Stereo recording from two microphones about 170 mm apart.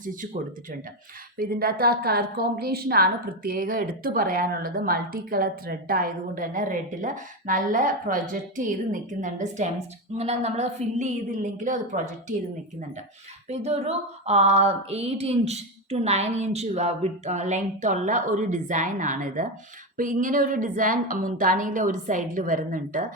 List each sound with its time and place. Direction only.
0.0 s a woman's voice: 50° right (ahead or behind)
1.4 s a woman's voice: 60° right (ahead or behind)
13.5 s a sound: 40° right (ahead or behind)
20.0 s a woman's voice: 50° right (ahead or behind)